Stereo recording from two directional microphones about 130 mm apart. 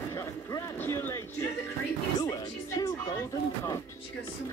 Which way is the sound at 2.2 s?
30° left (ahead or behind).